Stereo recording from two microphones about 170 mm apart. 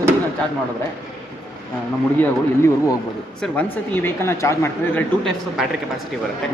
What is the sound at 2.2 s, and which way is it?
Speech, 15° left (ahead or behind).